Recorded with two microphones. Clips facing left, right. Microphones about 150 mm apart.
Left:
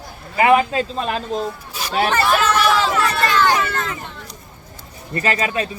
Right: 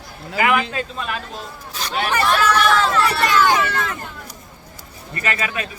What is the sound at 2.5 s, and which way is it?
Speech, 5° left (ahead or behind).